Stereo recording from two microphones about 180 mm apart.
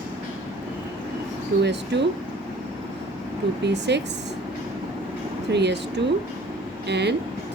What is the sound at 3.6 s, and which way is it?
Speech, 70° right (ahead or behind).